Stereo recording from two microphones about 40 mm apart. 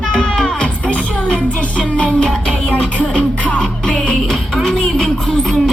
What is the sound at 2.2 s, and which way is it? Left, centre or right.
Music, centre.